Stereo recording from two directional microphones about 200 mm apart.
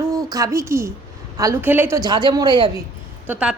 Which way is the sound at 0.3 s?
15° right (ahead or behind).